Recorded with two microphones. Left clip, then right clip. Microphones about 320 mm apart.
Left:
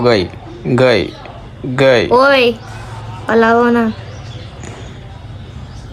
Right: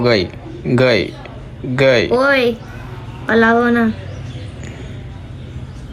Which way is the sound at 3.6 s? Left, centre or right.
Left.